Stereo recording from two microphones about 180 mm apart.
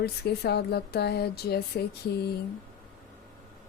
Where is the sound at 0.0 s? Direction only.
60° left (ahead or behind).